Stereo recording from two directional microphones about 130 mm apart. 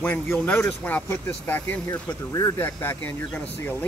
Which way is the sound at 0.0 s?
15° left (ahead or behind).